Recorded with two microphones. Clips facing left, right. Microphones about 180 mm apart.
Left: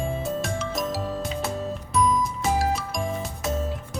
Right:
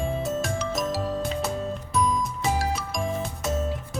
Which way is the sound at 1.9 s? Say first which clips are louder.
Left 3 dB; centre (ahead or behind).